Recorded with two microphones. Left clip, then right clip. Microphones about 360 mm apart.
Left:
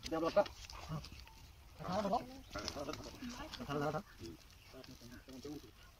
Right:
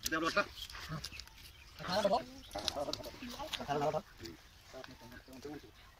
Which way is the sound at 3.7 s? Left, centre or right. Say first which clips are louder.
Right 5 dB; right.